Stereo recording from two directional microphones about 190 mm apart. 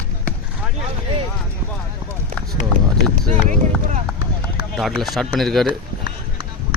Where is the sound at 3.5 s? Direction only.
40° right (ahead or behind).